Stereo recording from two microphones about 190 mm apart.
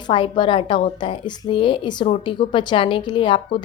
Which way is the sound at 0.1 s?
25° left (ahead or behind).